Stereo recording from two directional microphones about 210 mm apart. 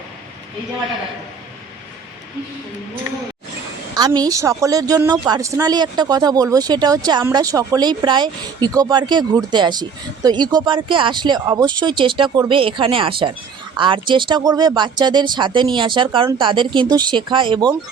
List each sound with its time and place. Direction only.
3.9 s a woman's voice: 20° right (ahead or behind)